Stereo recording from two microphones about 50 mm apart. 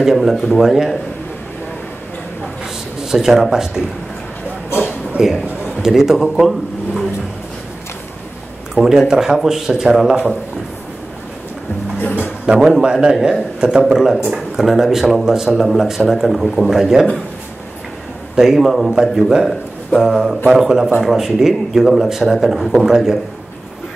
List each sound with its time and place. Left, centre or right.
0.0 s speech: centre
3.0 s speech: centre
4.8 s a sound: centre
5.8 s speech: centre
8.7 s speech: centre
12.5 s speech: centre
12.8 s speech: centre
13.6 s speech: centre
18.3 s speech: centre